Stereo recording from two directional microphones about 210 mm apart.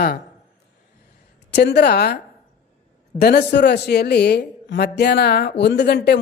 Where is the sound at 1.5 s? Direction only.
55° left (ahead or behind).